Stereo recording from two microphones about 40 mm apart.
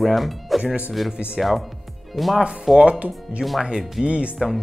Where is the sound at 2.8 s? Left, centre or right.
Right.